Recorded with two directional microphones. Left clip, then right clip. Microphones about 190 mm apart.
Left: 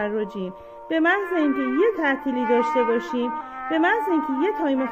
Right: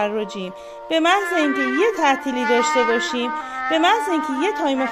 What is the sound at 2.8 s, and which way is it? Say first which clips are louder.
Speech: right 3 dB; 35° right (ahead or behind).